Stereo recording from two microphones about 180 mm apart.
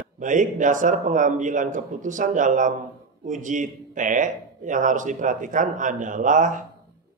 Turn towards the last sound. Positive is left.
turn(degrees=-45)  # may be behind; listen again after turning